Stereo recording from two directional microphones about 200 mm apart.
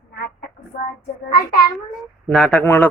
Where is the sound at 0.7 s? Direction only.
40° left (ahead or behind).